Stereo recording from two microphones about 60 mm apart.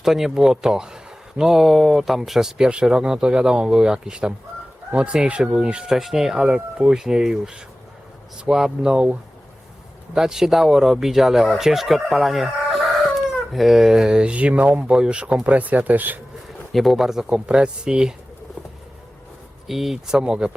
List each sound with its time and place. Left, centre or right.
0.0 s speech: centre
10.2 s speech: centre; by 16.2 s right
16.7 s speech: centre
17.2 s speech: centre
19.6 s speech: centre